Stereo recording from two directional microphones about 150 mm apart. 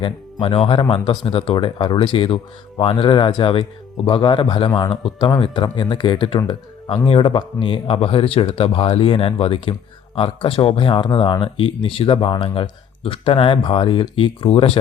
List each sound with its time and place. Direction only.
0.0 s speech: 35° left (ahead or behind)